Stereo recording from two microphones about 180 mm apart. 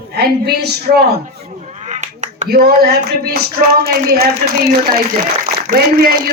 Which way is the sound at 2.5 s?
60° right (ahead or behind).